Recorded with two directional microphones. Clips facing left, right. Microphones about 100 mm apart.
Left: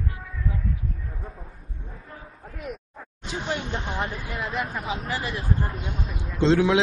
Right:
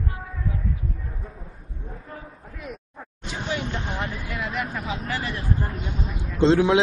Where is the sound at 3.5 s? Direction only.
30° left (ahead or behind).